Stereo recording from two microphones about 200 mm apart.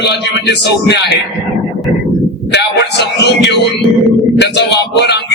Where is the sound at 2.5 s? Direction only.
60° left (ahead or behind).